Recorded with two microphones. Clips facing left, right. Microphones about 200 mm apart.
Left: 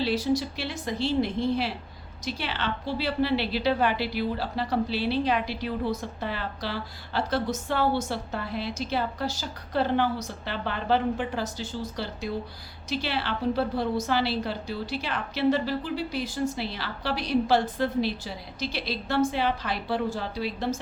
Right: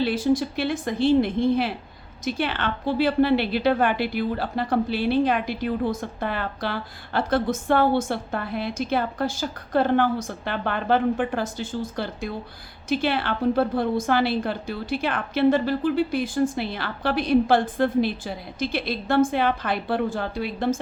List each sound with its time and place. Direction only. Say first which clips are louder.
0.0 s a woman's voice: right 4 dB; 50° right (ahead or behind)